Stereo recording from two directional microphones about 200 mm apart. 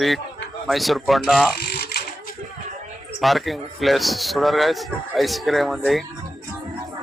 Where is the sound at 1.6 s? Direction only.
55° left (ahead or behind).